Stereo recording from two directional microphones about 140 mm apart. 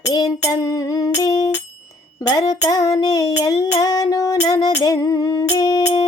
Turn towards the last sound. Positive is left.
turn(degrees=25)  # may be behind; listen again after turning